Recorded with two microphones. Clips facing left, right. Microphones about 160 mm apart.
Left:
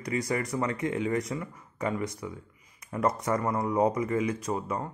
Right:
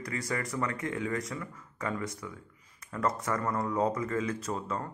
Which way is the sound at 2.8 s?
20° left (ahead or behind).